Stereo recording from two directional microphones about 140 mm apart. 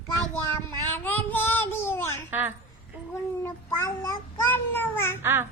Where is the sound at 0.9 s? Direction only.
15° left (ahead or behind).